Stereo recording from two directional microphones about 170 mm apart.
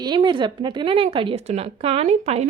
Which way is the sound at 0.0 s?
25° right (ahead or behind).